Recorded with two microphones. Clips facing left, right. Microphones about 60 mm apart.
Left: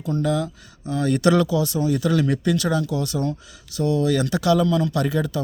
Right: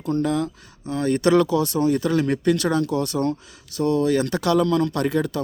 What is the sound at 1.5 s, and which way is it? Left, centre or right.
Speech, right.